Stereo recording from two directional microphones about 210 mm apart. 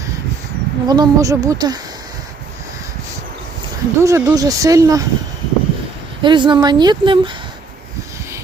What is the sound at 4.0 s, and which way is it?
Speech, 15° right (ahead or behind).